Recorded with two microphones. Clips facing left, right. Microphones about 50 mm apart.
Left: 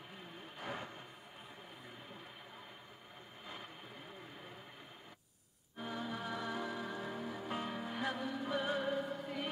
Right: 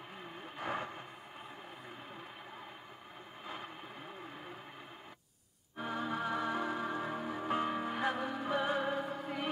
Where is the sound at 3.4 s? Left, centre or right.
Right.